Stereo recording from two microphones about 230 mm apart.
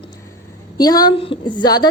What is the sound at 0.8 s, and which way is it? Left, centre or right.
A woman's voice, centre.